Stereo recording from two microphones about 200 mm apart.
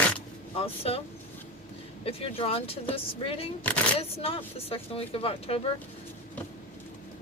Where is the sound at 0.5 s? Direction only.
30° left (ahead or behind).